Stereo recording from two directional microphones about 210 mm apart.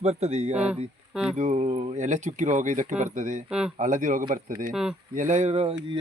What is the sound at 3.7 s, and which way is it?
Speech, 40° right (ahead or behind).